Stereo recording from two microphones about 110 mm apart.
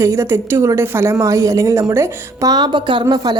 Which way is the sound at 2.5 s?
40° right (ahead or behind).